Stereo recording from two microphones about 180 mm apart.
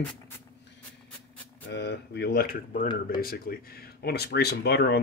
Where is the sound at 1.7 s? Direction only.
70° left (ahead or behind).